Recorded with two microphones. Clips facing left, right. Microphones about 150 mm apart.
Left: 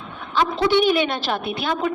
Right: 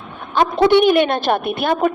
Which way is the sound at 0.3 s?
55° right (ahead or behind).